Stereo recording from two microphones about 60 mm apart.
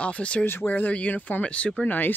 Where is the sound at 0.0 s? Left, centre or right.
Left.